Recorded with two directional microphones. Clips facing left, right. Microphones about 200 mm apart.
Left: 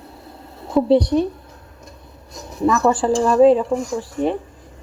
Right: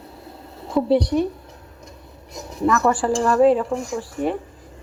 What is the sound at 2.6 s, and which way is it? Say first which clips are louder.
Speech: left 2 dB; 15° left (ahead or behind).